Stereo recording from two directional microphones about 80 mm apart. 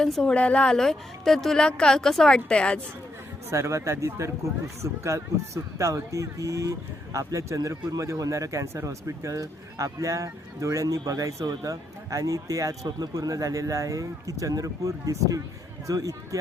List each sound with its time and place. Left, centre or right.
0.0 s a woman's voice: centre
3.5 s speech: right